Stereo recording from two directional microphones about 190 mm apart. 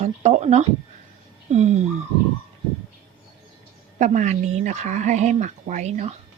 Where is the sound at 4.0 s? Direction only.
40° right (ahead or behind).